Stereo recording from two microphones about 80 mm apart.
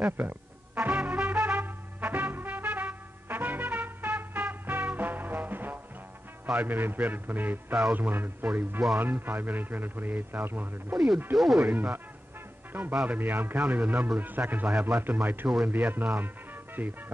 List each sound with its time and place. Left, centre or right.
0.2 s speech: centre
0.7 s music: centre
6.4 s a man's voice: centre
11.3 s speech: centre
11.6 s a man's voice: right
15.4 s speech: centre
15.7 s a man's voice: right